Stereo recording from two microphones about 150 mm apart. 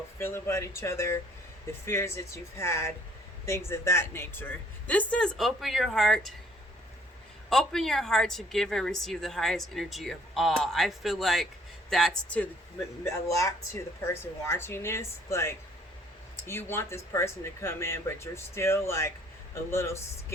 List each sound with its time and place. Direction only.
0.2 s speech: 15° left (ahead or behind); by 6.3 s centre (ahead or behind)
7.5 s a woman's voice: 5° left (ahead or behind)
13.1 s speech: 20° left (ahead or behind)